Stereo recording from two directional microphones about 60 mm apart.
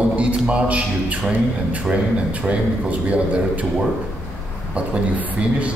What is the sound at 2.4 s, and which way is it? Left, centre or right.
Speech, right.